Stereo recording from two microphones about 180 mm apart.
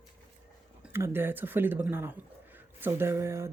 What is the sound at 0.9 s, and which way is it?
Speech, 15° right (ahead or behind).